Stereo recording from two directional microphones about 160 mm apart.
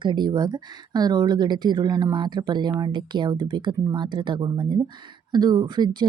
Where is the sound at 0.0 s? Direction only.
30° right (ahead or behind).